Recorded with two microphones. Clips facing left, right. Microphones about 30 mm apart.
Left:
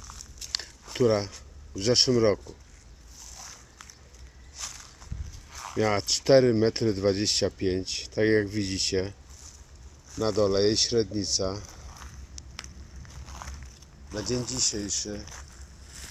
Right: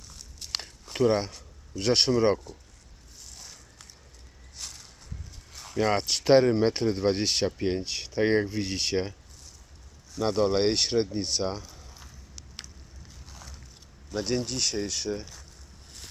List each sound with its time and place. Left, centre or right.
0.6 s biting: centre
1.8 s speech: centre
5.7 s speech: centre
10.2 s speech: centre
11.6 s a sound: centre
14.1 s speech: centre